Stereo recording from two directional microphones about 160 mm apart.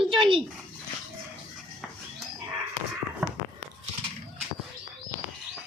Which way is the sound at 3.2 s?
5° right (ahead or behind).